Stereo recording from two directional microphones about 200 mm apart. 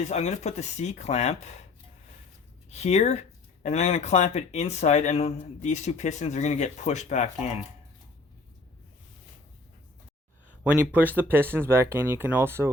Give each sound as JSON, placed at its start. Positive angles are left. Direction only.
{"t": 0.1, "sound": "speech", "side_deg": 35}
{"t": 2.6, "sound": "speech", "side_deg": 35}
{"t": 10.6, "sound": "speech", "side_deg": -5}